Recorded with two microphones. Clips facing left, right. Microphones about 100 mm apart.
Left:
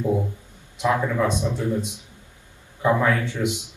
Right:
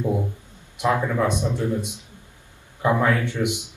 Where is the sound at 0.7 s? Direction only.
15° right (ahead or behind).